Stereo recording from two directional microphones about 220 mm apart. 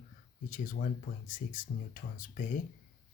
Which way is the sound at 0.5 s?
40° left (ahead or behind).